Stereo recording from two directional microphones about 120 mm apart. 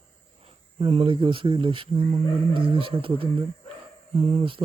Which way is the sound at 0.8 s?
50° right (ahead or behind).